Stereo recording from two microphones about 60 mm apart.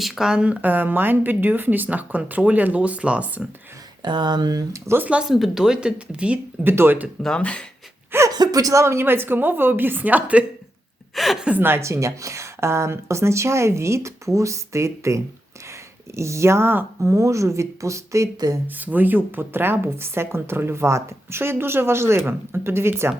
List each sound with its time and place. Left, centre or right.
0.0 s speech: centre
4.9 s speech: right
5.2 s speech: centre
6.7 s a woman's voice: right
7.3 s speech: centre
8.3 s speech: right
8.8 s a woman's voice: right
11.1 s a woman's voice: centre
11.5 s a woman's voice: right
11.8 s speech: right
17.0 s speech: right
18.8 s speech: right